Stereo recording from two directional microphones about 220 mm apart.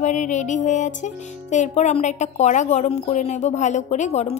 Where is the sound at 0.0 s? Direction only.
35° left (ahead or behind).